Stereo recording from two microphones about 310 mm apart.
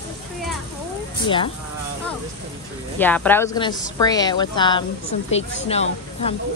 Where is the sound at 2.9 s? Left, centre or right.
Centre.